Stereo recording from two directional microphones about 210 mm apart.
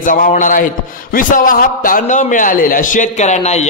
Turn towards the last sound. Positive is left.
turn(degrees=30)  # may be behind; listen again after turning